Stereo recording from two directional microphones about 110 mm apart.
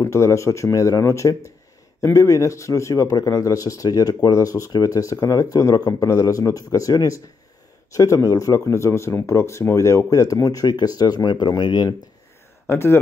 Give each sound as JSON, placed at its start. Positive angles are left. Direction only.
{"t": 0.0, "sound": "speech", "side_deg": 30}
{"t": 12.6, "sound": "speech", "side_deg": 20}